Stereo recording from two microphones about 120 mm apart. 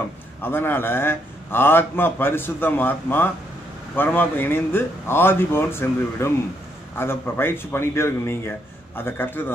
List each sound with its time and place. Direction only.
0.4 s a man's voice: 15° left (ahead or behind)